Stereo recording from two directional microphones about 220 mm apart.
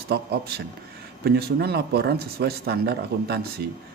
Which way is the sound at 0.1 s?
45° right (ahead or behind).